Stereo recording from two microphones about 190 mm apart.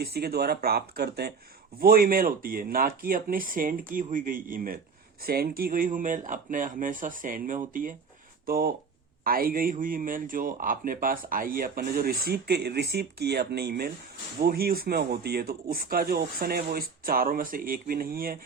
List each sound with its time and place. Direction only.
0.0 s speech: 55° right (ahead or behind)